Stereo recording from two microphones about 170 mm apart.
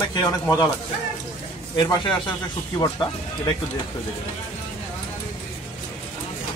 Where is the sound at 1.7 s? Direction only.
25° left (ahead or behind).